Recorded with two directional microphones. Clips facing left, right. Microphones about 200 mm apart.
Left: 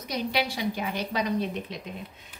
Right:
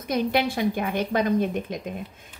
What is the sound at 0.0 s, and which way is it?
A woman's voice, 50° right (ahead or behind).